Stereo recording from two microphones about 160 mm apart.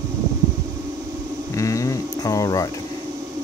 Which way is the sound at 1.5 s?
20° left (ahead or behind).